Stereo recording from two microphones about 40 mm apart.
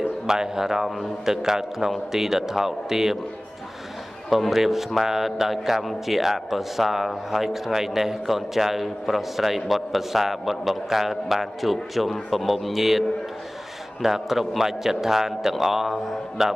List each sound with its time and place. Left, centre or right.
0.3 s a man's voice: centre
4.3 s a man's voice: centre
14.0 s a man's voice: centre